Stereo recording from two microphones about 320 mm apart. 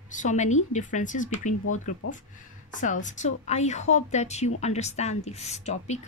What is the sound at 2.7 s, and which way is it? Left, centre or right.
Speech, left.